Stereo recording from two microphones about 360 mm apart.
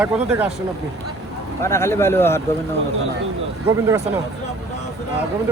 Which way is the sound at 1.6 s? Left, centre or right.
Centre.